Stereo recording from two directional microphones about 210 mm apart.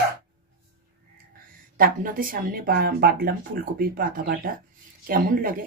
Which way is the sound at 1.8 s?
40° right (ahead or behind).